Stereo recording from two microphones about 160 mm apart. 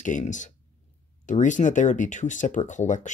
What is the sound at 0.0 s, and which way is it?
Speech, 50° left (ahead or behind).